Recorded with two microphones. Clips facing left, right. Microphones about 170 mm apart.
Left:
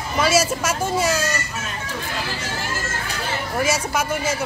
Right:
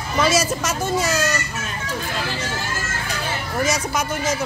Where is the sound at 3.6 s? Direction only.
5° left (ahead or behind).